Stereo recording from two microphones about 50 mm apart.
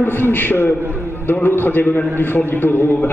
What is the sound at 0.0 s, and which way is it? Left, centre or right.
A man's voice, left.